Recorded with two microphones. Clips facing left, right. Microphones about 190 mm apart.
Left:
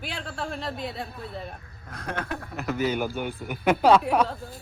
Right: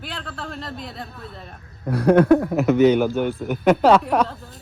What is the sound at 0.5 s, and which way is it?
Speech, centre (ahead or behind).